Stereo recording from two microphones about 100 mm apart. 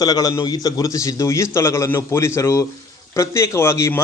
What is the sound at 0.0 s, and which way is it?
A man's voice, 40° left (ahead or behind).